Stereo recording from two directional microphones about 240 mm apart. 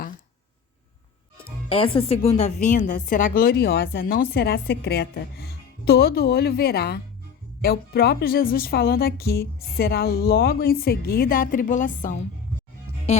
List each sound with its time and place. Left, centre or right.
1.7 s a woman's voice: left